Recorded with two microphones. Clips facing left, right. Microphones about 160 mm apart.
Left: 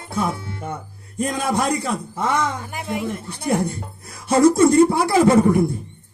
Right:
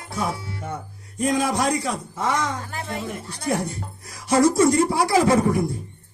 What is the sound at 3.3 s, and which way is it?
Speech, 55° left (ahead or behind).